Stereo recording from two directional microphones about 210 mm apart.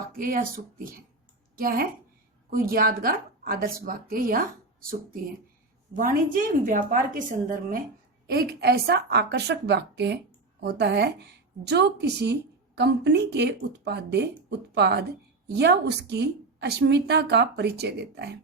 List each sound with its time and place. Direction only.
0.2 s a woman's voice: 40° right (ahead or behind)